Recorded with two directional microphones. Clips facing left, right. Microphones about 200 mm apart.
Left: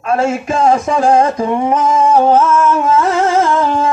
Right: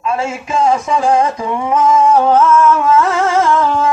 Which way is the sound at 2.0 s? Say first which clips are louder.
Even; 25° left (ahead or behind).